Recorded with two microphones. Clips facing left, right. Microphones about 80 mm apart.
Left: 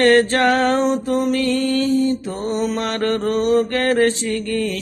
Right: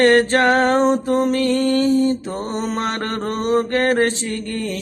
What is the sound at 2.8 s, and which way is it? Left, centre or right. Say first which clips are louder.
Mantra: left 2 dB; right.